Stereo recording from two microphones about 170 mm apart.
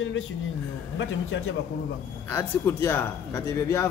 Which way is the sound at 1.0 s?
90° left.